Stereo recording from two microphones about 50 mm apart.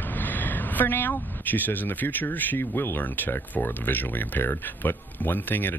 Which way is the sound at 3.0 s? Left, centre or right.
Left.